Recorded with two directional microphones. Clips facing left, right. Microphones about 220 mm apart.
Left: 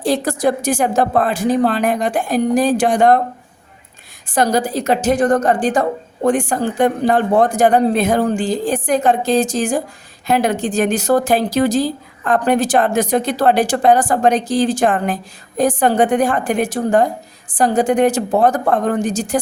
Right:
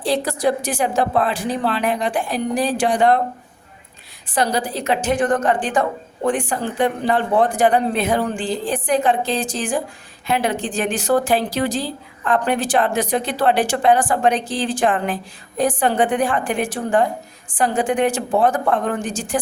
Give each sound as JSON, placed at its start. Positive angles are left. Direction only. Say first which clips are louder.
{"t": 0.0, "sound": "speech", "louder": "left 3 dB", "side_deg": 45}
{"t": 4.3, "sound": "speech", "louder": "left 4 dB", "side_deg": 45}